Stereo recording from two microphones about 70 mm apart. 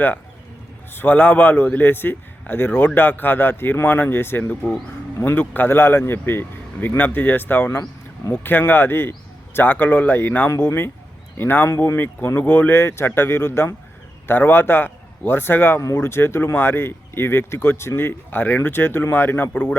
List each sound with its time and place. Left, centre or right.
0.9 s a man's voice: left
10.5 s a man's voice: left
15.8 s a man's voice: left